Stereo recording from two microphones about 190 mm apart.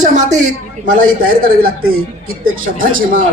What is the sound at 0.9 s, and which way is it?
Speech, 45° right (ahead or behind).